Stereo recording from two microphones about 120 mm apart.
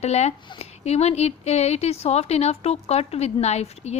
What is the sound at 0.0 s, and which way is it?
A woman's voice, 65° left (ahead or behind).